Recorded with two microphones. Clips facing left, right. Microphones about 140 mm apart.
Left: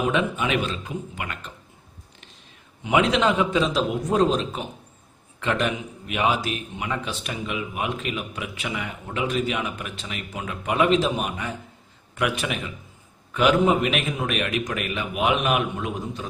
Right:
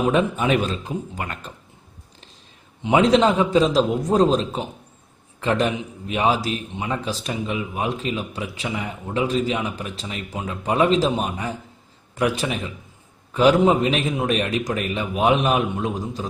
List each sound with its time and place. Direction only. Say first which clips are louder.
0.1 s a man's voice: right 4 dB; 40° right (ahead or behind)
2.8 s a man's voice: right 4 dB; 35° right (ahead or behind)